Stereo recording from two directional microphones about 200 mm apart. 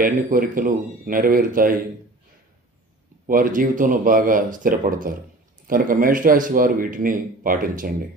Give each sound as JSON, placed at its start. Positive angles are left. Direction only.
{"t": 0.0, "sound": "a man's voice", "side_deg": -40}
{"t": 3.3, "sound": "a man's voice", "side_deg": -45}